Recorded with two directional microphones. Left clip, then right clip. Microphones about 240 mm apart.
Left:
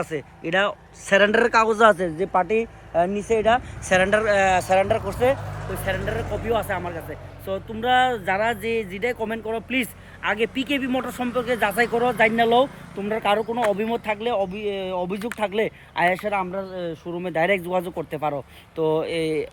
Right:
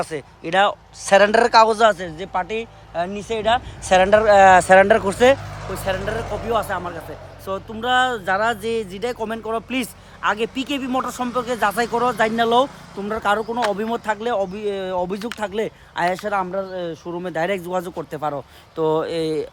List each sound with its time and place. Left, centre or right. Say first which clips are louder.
0.1 s speech: right 3 dB; centre
1.8 s speech: even; centre
2.9 s speech: left 3 dB; centre
3.9 s speech: right 6 dB; centre
4.5 s speech: right 8 dB; right
5.6 s speech: right 3 dB; centre